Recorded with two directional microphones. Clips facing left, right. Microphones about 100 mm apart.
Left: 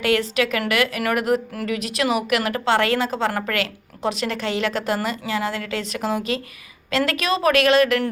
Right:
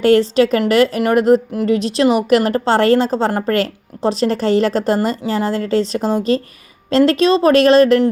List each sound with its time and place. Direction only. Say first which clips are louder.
0.0 s speech: right 9 dB; 35° right (ahead or behind)